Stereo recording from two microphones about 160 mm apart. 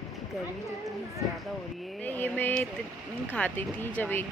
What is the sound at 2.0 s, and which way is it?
Speech, 10° left (ahead or behind).